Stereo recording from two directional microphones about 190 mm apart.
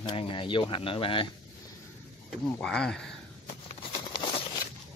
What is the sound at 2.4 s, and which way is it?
Speech, 5° left (ahead or behind).